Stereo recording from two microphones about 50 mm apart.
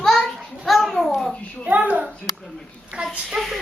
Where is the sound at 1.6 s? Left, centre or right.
Right.